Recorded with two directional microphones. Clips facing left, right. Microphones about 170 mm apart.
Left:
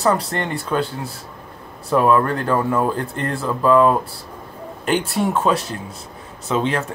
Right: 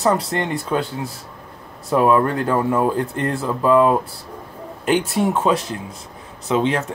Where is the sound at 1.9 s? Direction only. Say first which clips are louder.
Even; 15° right (ahead or behind).